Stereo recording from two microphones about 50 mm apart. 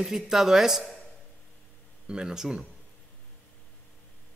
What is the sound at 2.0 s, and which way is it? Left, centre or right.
Speech, centre.